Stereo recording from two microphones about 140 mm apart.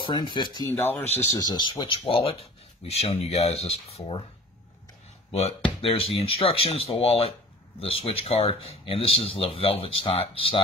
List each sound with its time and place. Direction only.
0.0 s speech: 35° left (ahead or behind)
0.7 s speech: 15° left (ahead or behind)
1.4 s speech: 30° left (ahead or behind)
5.3 s speech: 45° left (ahead or behind)